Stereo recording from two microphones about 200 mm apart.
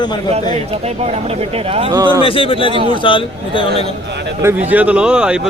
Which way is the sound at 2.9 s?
25° left (ahead or behind).